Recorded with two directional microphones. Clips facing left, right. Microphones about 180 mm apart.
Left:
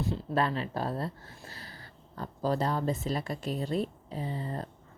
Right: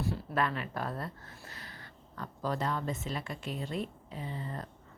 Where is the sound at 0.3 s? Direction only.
30° left (ahead or behind).